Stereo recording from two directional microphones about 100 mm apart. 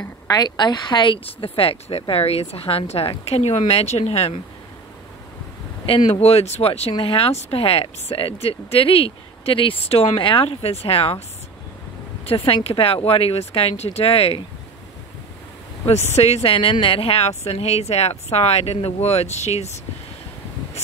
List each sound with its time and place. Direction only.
0.3 s speech: 45° left (ahead or behind); by 4.4 s 90° left
6.1 s speech: 90° left; by 11.1 s 70° left (ahead or behind)
12.3 s speech: 70° left (ahead or behind)
15.9 s speech: 90° left